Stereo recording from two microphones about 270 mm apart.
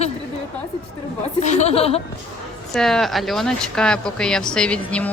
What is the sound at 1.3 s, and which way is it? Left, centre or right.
Speech, left.